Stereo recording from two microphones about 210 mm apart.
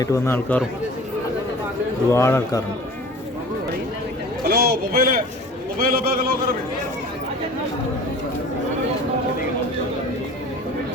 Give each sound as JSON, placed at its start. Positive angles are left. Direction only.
{"t": 0.0, "sound": "speech", "side_deg": 15}
{"t": 2.1, "sound": "speech", "side_deg": 15}
{"t": 4.4, "sound": "a sound", "side_deg": -50}
{"t": 5.7, "sound": "a man's voice", "side_deg": -45}